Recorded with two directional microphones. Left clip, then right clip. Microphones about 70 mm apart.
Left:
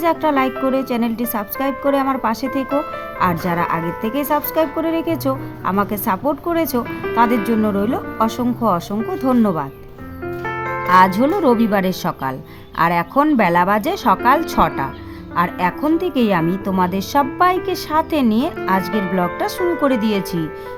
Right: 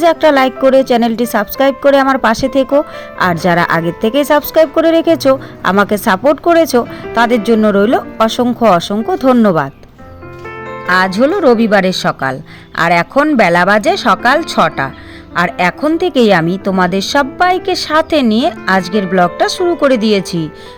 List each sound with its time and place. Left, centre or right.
0.0 s speech: right
7.8 s speech: right
9.3 s speech: right
10.4 s music: centre
10.8 s a woman's voice: right